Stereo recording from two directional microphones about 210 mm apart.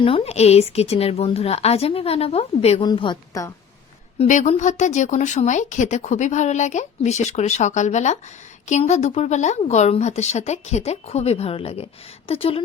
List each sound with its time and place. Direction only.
0.0 s a woman's voice: 30° left (ahead or behind)
4.2 s a woman's voice: 35° left (ahead or behind)